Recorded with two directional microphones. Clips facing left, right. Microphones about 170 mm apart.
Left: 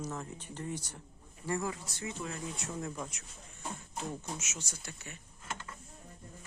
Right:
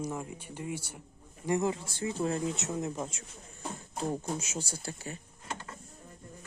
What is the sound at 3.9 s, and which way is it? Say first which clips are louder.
Speech: right 8 dB; 35° right (ahead or behind).